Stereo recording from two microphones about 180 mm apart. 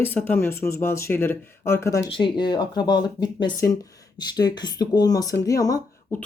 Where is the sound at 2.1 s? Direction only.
25° left (ahead or behind).